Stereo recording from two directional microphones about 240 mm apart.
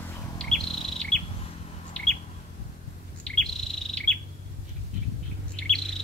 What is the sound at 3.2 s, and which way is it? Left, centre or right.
Bird, centre.